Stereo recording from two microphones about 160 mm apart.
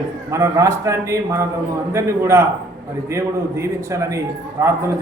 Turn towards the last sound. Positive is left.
turn(degrees=-15)  # may be behind; listen again after turning